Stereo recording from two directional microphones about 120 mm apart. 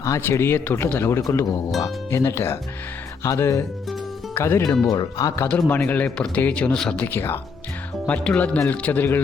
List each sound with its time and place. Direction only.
0.0 s a man's voice: 25° left (ahead or behind)
5.5 s speech: 15° left (ahead or behind)